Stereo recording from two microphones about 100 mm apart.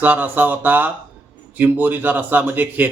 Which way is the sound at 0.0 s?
15° right (ahead or behind).